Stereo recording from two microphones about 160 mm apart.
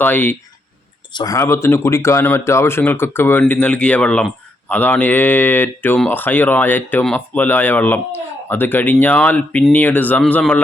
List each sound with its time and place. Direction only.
0.0 s speech: 10° left (ahead or behind)
1.1 s speech: 25° left (ahead or behind)